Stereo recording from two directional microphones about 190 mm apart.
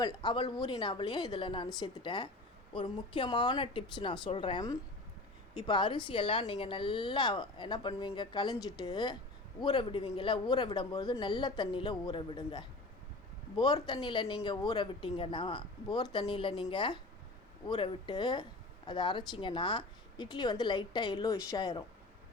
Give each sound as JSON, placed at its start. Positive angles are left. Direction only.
{"t": 0.0, "sound": "a woman's voice", "side_deg": 20}
{"t": 13.7, "sound": "a woman's voice", "side_deg": 25}